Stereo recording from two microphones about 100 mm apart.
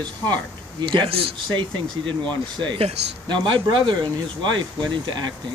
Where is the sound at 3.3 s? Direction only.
50° right (ahead or behind).